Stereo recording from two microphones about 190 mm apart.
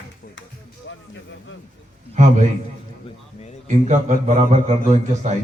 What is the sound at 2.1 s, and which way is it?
Speech, 40° right (ahead or behind).